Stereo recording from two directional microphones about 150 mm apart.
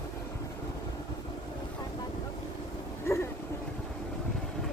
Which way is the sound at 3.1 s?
15° left (ahead or behind).